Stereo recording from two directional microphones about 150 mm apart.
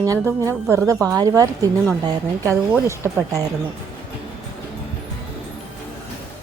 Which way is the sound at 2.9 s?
20° right (ahead or behind).